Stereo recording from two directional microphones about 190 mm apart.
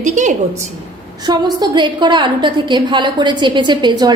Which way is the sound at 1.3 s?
20° right (ahead or behind).